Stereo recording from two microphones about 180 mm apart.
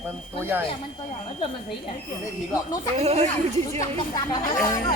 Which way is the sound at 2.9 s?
35° right (ahead or behind).